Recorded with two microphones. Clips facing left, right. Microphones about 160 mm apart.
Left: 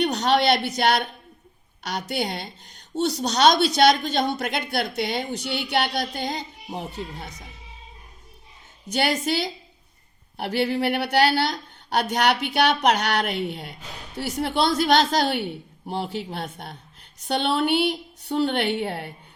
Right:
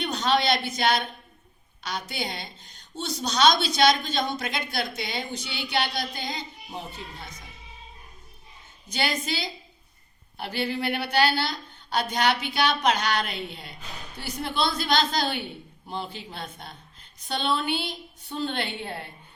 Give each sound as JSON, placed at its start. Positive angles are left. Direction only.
{"t": 0.3, "sound": "a woman's voice", "side_deg": 60}
{"t": 8.9, "sound": "a woman's voice", "side_deg": 65}